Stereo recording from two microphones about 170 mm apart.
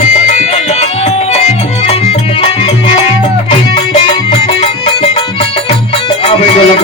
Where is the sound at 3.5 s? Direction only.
35° left (ahead or behind).